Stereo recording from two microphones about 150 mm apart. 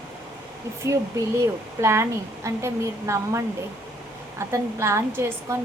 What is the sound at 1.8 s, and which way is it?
Speech, 20° right (ahead or behind).